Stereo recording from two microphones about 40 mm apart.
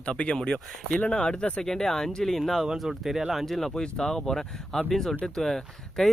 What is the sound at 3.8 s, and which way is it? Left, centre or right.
Speech, centre.